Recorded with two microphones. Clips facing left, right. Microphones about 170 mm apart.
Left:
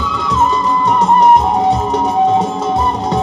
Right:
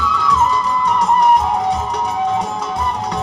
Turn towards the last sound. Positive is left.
turn(degrees=25)  # may be behind; listen again after turning